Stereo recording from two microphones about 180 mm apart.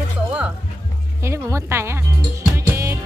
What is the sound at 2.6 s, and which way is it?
Music, 15° right (ahead or behind).